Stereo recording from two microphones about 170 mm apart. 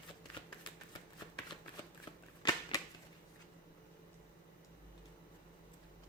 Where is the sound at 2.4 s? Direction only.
30° left (ahead or behind).